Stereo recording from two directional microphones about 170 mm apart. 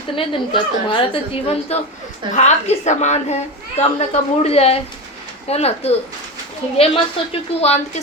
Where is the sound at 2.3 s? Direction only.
40° left (ahead or behind).